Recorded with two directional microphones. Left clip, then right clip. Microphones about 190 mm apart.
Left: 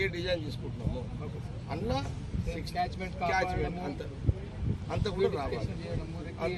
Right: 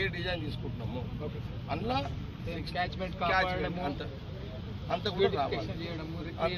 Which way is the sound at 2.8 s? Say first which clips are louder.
Even; 30° left (ahead or behind).